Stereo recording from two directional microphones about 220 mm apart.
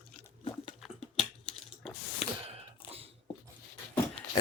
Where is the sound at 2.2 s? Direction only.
30° left (ahead or behind).